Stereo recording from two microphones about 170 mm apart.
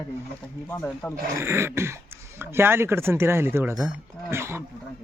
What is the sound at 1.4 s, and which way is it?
Speech, 15° right (ahead or behind).